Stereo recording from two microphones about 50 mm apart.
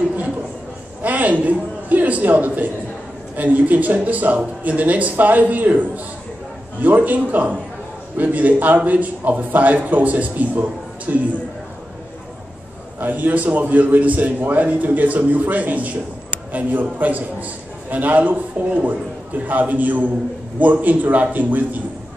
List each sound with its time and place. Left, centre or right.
1.0 s a man's voice: right
13.0 s a man's voice: right
17.0 s a man's voice: right